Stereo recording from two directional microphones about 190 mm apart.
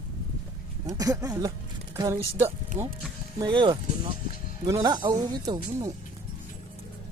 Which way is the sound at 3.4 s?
25° right (ahead or behind).